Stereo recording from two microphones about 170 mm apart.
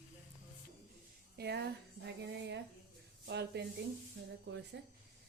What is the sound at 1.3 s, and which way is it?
Speech, 75° right (ahead or behind).